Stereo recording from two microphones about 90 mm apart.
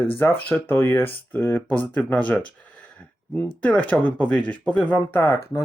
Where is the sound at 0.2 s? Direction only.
25° left (ahead or behind).